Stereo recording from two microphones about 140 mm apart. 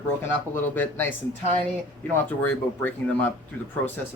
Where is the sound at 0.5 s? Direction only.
15° left (ahead or behind).